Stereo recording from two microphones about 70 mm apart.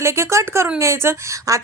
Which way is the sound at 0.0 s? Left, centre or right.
Right.